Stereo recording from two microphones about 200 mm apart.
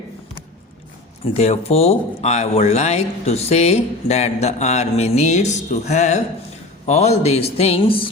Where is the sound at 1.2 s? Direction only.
30° left (ahead or behind).